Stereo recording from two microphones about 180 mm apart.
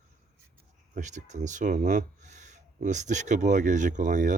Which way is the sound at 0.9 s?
40° right (ahead or behind).